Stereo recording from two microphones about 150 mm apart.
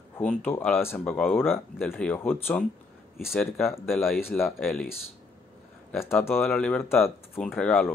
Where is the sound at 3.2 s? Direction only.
Centre (ahead or behind).